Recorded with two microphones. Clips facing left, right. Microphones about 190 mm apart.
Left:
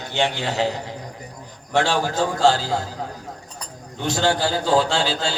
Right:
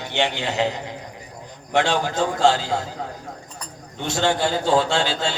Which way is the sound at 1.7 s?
20° right (ahead or behind).